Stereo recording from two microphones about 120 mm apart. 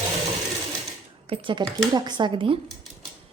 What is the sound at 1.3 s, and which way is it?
Speech, 45° right (ahead or behind).